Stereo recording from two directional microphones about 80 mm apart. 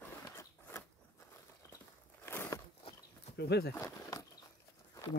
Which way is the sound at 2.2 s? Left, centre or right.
Left.